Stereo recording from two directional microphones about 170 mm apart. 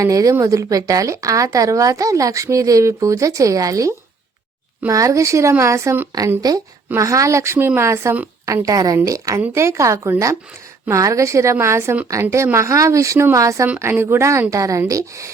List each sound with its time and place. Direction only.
0.0 s speech: 20° right (ahead or behind)